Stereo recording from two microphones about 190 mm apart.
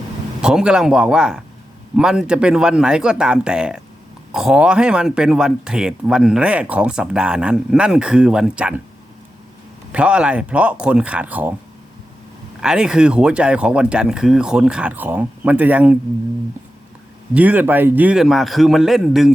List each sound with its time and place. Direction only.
0.4 s speech: 5° right (ahead or behind)
9.9 s speech: 5° right (ahead or behind)
12.5 s speech: 5° right (ahead or behind)
17.3 s speech: 10° right (ahead or behind)